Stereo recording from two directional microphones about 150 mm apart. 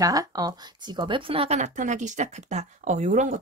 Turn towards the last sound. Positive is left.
turn(degrees=-55)  # may be behind; listen again after turning